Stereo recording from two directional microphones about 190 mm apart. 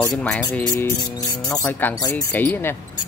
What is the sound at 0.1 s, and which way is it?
Speech, 5° left (ahead or behind).